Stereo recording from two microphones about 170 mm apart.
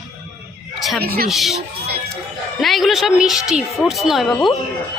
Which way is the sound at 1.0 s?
65° right (ahead or behind).